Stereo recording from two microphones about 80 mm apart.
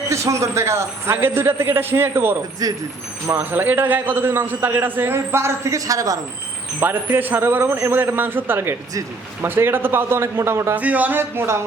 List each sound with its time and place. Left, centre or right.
0.1 s a man's voice: right
2.6 s speech: right
3.2 s a man's voice: right
6.7 s a man's voice: right
10.8 s a man's voice: centre